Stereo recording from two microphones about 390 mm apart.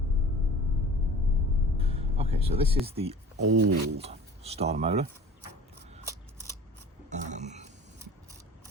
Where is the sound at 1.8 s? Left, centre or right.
Centre.